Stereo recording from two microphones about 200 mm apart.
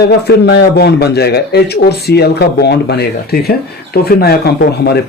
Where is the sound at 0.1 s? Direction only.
55° left (ahead or behind).